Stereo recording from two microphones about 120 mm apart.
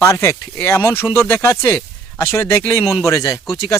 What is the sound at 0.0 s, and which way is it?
Speech, 20° left (ahead or behind).